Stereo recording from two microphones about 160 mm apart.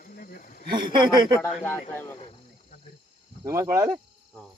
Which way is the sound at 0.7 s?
30° right (ahead or behind).